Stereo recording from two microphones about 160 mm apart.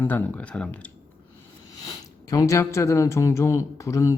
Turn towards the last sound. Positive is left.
turn(degrees=20)  # may be behind; listen again after turning